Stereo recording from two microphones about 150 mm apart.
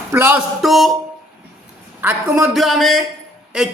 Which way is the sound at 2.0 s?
10° right (ahead or behind).